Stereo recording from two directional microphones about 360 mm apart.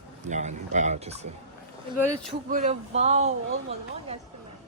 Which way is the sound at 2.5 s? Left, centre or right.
Centre.